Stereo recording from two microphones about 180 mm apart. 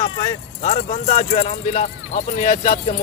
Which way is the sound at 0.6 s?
40° left (ahead or behind).